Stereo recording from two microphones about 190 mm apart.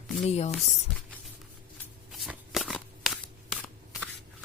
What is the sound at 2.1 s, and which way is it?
Shuffling cards, centre (ahead or behind).